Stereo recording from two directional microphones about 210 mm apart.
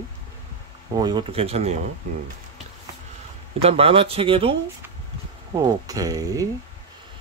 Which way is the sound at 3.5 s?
30° right (ahead or behind).